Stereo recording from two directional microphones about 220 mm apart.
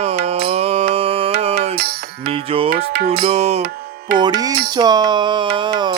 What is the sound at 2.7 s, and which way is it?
Music, 45° right (ahead or behind).